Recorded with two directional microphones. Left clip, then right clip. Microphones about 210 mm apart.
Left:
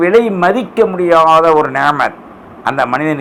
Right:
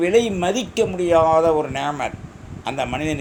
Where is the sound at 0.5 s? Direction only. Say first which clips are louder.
Left 8 dB; 5° left (ahead or behind).